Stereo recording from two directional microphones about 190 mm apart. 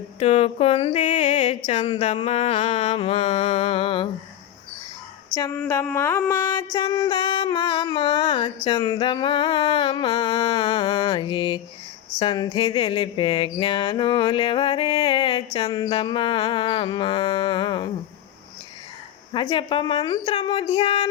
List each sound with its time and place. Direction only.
0.2 s music: 35° left (ahead or behind)
5.6 s a sound: 15° left (ahead or behind)
19.3 s music: 25° left (ahead or behind)